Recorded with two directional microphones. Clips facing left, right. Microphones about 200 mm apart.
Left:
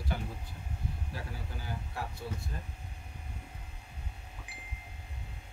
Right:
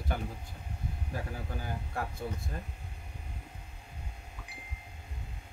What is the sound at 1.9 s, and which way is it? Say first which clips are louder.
Speech: right 4 dB; 50° right (ahead or behind).